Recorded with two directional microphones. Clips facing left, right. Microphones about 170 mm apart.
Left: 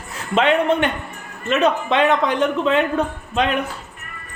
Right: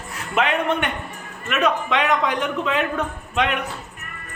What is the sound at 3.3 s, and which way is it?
Speech, 30° left (ahead or behind).